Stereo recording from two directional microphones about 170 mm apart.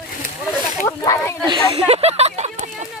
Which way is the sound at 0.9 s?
20° left (ahead or behind).